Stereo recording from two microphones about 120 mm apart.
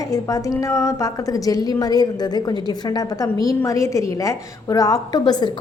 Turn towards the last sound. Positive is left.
turn(degrees=35)  # may be behind; listen again after turning